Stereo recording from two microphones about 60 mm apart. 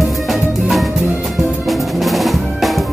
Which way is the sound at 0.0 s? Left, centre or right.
Centre.